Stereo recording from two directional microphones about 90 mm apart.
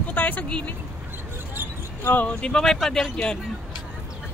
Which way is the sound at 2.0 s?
15° left (ahead or behind).